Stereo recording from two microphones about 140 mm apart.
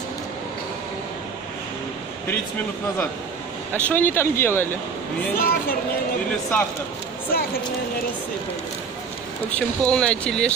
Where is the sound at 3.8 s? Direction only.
15° left (ahead or behind).